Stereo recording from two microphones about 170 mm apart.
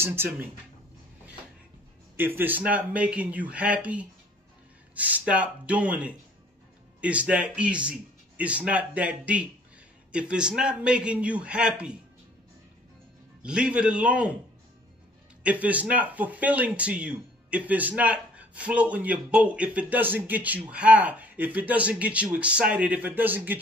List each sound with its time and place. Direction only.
0.0 s speech: 15° right (ahead or behind)
2.1 s speech: 10° right (ahead or behind)
13.4 s speech: 5° right (ahead or behind)
15.4 s speech: 10° right (ahead or behind)